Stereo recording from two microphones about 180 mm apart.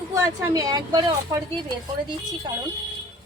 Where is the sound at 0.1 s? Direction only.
20° right (ahead or behind).